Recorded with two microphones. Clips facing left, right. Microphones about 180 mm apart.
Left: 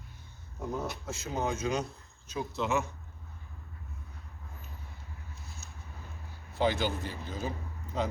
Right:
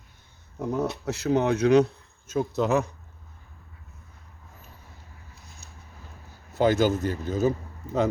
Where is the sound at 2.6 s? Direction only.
40° right (ahead or behind).